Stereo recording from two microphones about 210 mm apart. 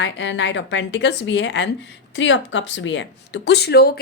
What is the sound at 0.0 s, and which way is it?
A woman's voice, 60° left (ahead or behind).